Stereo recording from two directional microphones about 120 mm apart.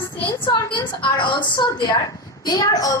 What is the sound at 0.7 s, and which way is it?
A woman's voice, 40° left (ahead or behind).